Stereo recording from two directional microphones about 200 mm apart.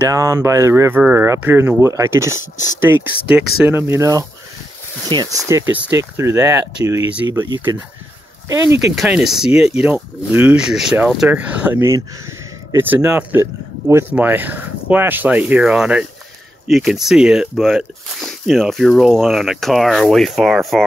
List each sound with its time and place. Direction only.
0.1 s speech: 15° right (ahead or behind)
8.5 s speech: 15° right (ahead or behind)
8.9 s speech: centre (ahead or behind)